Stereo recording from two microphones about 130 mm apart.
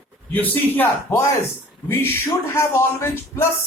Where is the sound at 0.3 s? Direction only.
15° left (ahead or behind).